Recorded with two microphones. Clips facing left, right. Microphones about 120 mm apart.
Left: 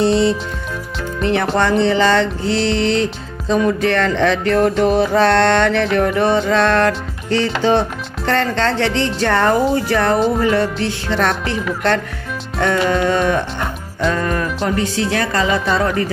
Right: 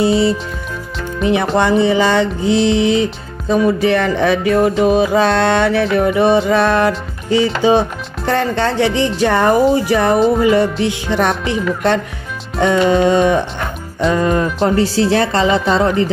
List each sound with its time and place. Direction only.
0.0 s speech: 5° right (ahead or behind)
1.2 s music: 15° right (ahead or behind)
12.6 s speech: 20° right (ahead or behind)
13.0 s music: 15° right (ahead or behind)
14.1 s speech: 20° right (ahead or behind)